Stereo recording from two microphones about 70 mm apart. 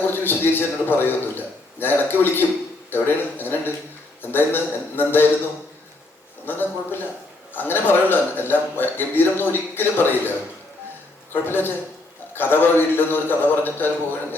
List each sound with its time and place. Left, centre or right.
0.1 s a man's voice: left
6.4 s a man's voice: left
11.4 s a man's voice: left